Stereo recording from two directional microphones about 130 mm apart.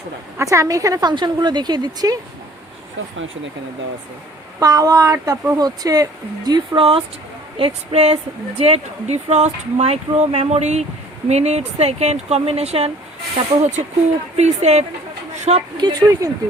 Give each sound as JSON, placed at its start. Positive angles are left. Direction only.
{"t": 0.3, "sound": "speech", "side_deg": -25}
{"t": 4.6, "sound": "speech", "side_deg": -25}
{"t": 7.5, "sound": "speech", "side_deg": -50}
{"t": 15.8, "sound": "speech", "side_deg": -35}